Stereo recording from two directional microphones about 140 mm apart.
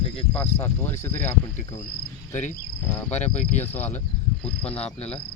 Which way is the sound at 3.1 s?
55° left (ahead or behind).